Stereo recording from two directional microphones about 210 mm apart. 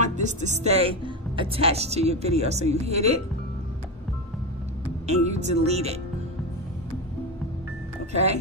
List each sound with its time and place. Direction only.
0.0 s speech: 35° right (ahead or behind)
5.0 s speech: 30° right (ahead or behind)
8.1 s speech: 30° right (ahead or behind)